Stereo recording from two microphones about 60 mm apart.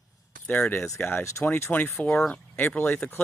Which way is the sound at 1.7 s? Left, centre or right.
Left.